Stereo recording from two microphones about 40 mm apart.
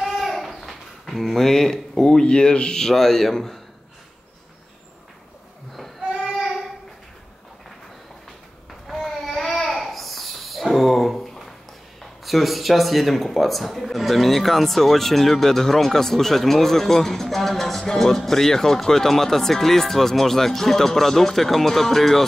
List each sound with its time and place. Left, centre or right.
0.0 s a sound: centre
2.2 s speech: left
2.9 s speech: centre
9.0 s music: centre
12.0 s speech: centre